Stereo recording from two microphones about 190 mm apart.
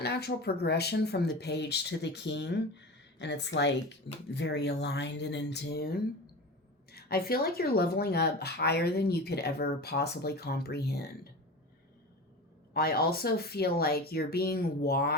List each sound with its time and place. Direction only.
0.0 s speech: 55° left (ahead or behind)
12.7 s speech: 55° left (ahead or behind)